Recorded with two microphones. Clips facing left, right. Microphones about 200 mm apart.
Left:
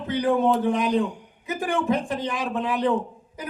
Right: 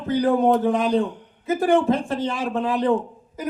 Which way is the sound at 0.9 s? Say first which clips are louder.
Right 2 dB; 15° left (ahead or behind).